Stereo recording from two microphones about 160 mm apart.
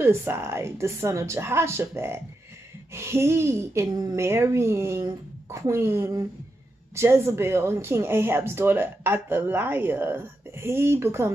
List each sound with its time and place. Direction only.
0.0 s speech: 15° right (ahead or behind)